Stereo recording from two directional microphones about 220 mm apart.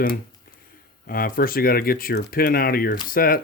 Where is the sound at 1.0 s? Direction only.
40° left (ahead or behind).